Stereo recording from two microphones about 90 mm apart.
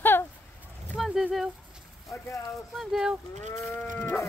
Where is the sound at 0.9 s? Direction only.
5° right (ahead or behind).